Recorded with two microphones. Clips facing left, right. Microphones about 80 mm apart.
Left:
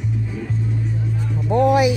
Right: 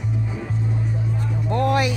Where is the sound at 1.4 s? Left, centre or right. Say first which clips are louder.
Left 5 dB; centre.